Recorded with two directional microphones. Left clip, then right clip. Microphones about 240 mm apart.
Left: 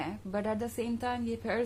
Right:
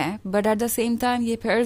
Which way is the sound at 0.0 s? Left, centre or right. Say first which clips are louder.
Right 12 dB; right.